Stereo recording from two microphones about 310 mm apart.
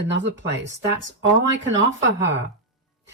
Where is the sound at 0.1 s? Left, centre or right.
Right.